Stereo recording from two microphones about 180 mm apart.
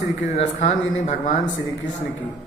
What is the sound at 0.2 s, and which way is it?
Speech, 40° left (ahead or behind).